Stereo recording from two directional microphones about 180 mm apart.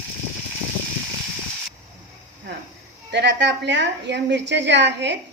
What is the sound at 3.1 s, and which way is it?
A woman's voice, 75° right (ahead or behind).